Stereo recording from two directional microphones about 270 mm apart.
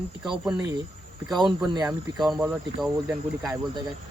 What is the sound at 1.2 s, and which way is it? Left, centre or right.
Speech, centre.